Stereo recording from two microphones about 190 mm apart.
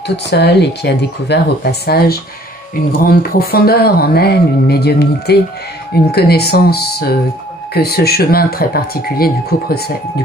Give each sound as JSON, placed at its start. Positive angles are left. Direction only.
{"t": 0.1, "sound": "speech", "side_deg": 60}